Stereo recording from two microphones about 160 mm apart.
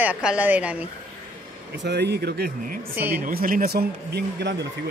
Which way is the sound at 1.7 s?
90° right.